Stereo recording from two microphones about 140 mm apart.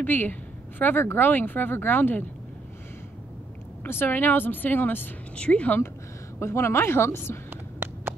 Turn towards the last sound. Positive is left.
turn(degrees=-15)  # may be behind; listen again after turning